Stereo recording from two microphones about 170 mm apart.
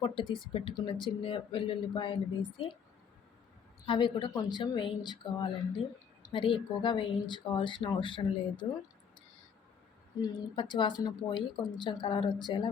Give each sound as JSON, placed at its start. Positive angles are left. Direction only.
{"t": 0.5, "sound": "speech", "side_deg": 30}
{"t": 3.8, "sound": "speech", "side_deg": 30}
{"t": 10.2, "sound": "speech", "side_deg": 25}